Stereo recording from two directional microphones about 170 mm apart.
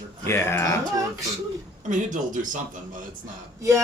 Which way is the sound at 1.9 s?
50° right (ahead or behind).